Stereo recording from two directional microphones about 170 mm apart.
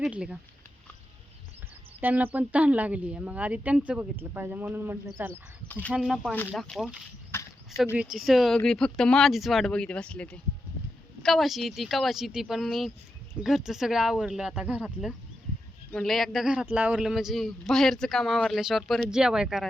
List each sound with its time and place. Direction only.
0.0 s speech: 5° right (ahead or behind)
2.0 s speech: 10° right (ahead or behind)
5.3 s speech: 10° left (ahead or behind)
5.9 s a man's voice: 5° right (ahead or behind)
7.3 s horse: 15° left (ahead or behind)
8.1 s a man's voice: centre (ahead or behind)
15.9 s a man's voice: centre (ahead or behind)